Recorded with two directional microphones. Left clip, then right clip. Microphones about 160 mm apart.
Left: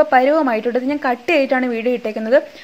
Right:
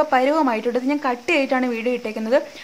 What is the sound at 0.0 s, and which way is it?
Speech, 10° left (ahead or behind).